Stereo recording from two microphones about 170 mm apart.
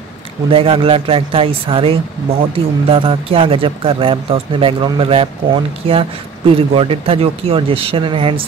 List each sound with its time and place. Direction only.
0.5 s speech: 35° right (ahead or behind)